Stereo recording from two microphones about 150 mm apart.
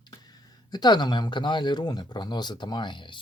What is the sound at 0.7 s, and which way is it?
Speech, 30° left (ahead or behind).